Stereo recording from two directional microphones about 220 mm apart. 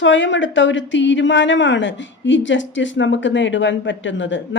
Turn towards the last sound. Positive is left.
turn(degrees=55)  # may be behind; listen again after turning